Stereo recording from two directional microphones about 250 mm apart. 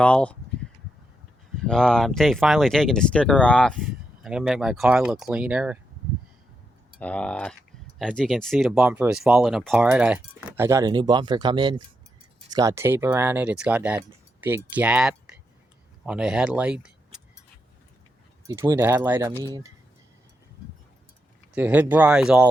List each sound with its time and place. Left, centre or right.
0.0 s speech: centre
1.6 s speech: centre
7.0 s speech: centre
18.4 s speech: centre
21.5 s speech: centre